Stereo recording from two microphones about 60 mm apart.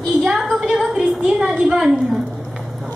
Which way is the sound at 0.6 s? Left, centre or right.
Centre.